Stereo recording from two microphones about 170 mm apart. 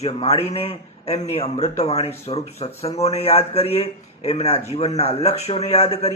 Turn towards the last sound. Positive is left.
turn(degrees=40)  # may be behind; listen again after turning